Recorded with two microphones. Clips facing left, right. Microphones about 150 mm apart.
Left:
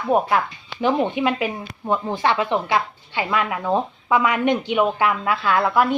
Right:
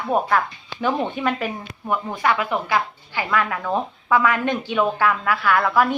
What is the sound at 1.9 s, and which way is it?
A woman's voice, 25° left (ahead or behind).